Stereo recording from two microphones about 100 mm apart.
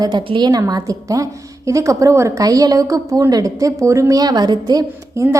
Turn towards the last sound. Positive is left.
turn(degrees=-30)  # may be behind; listen again after turning